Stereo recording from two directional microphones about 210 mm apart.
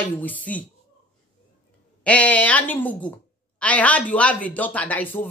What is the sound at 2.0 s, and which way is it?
A woman's voice, 5° left (ahead or behind).